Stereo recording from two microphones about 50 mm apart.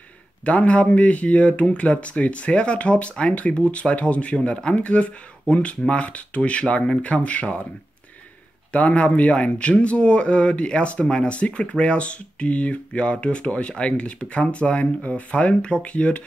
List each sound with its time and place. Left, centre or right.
0.5 s speech: left
8.7 s speech: left